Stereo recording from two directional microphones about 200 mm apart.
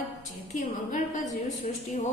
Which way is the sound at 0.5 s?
40° left (ahead or behind).